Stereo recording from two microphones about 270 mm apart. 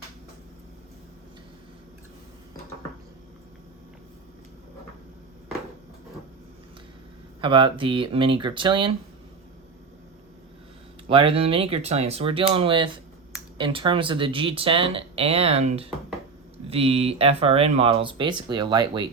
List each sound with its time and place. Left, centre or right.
7.4 s speech: centre
11.1 s speech: centre